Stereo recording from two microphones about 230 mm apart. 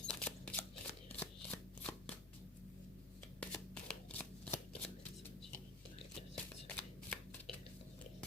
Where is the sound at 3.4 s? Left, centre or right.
Centre.